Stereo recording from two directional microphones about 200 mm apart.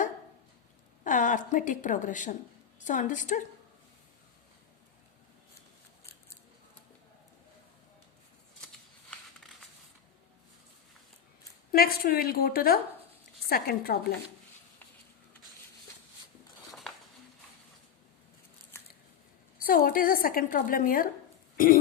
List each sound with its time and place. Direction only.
1.0 s a woman's voice: 40° left (ahead or behind)
11.7 s a woman's voice: 50° left (ahead or behind)
19.6 s a woman's voice: 45° left (ahead or behind)